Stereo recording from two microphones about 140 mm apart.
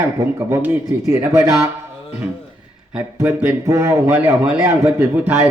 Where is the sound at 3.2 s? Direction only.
10° right (ahead or behind).